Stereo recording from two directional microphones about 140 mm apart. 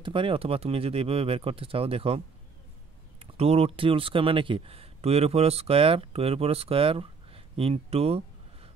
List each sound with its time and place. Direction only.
0.0 s speech: 35° right (ahead or behind)